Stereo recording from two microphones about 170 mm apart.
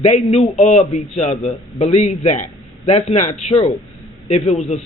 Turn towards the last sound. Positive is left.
turn(degrees=40)  # may be behind; listen again after turning